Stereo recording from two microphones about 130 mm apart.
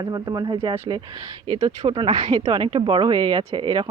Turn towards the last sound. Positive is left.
turn(degrees=-35)  # may be behind; listen again after turning